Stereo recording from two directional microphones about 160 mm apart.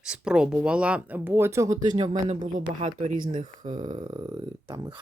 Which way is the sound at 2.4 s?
60° right (ahead or behind).